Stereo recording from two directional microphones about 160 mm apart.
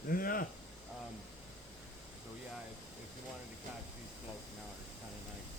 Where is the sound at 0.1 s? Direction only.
60° left (ahead or behind).